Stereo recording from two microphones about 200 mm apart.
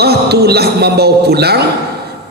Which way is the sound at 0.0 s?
55° right (ahead or behind).